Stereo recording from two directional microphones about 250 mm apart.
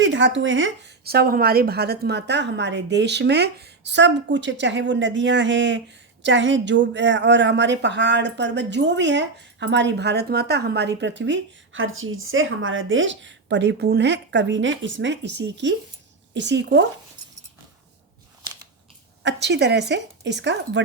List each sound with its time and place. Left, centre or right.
0.0 s speech: right
19.2 s speech: right